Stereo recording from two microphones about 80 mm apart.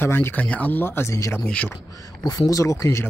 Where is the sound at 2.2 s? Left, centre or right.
Left.